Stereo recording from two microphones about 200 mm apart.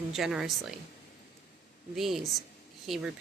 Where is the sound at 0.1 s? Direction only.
Centre (ahead or behind).